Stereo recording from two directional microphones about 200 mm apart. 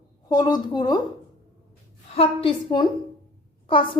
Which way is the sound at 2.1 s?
30° left (ahead or behind).